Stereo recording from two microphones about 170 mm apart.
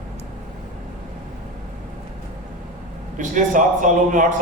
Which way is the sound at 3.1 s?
50° right (ahead or behind).